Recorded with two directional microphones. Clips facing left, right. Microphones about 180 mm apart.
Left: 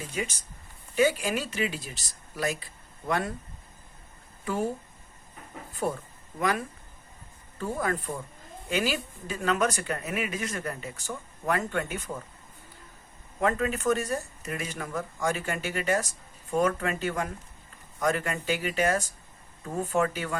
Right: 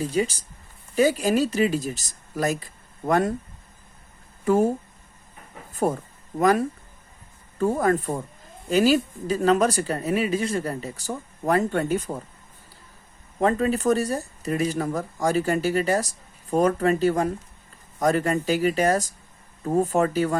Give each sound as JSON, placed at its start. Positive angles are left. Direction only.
{"t": 0.0, "sound": "speech", "side_deg": -35}
{"t": 4.4, "sound": "speech", "side_deg": -45}
{"t": 5.7, "sound": "speech", "side_deg": -45}
{"t": 13.4, "sound": "speech", "side_deg": -35}